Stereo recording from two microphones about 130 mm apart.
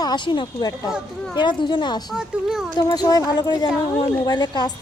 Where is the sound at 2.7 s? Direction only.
30° left (ahead or behind).